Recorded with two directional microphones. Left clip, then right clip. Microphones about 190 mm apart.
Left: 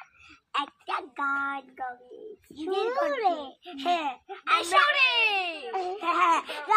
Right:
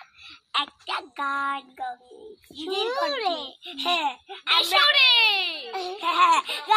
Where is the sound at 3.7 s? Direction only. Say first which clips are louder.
Right 3 dB; 25° right (ahead or behind).